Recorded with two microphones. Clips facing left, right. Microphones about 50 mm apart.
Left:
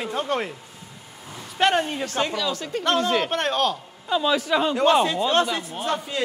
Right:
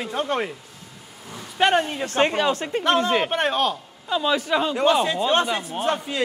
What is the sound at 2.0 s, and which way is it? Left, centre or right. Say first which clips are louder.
Speech: right 5 dB; right.